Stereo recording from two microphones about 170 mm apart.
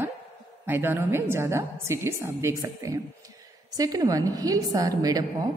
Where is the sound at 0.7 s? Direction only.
15° right (ahead or behind).